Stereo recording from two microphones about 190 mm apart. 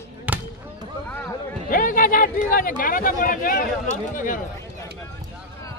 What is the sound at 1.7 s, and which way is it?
Speech, 45° left (ahead or behind).